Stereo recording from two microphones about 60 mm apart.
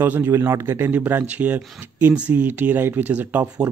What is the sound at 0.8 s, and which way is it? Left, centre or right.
Speech, right.